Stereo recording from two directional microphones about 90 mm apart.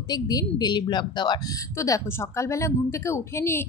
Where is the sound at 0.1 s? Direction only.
45° left (ahead or behind).